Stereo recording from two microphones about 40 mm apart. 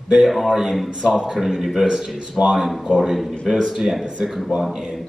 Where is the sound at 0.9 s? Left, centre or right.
Centre.